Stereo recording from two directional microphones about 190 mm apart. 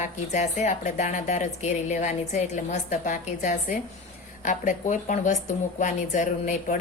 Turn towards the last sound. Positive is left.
turn(degrees=45)  # may be behind; listen again after turning